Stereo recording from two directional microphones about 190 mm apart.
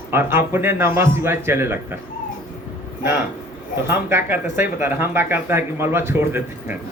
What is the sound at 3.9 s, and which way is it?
Speech, 10° right (ahead or behind).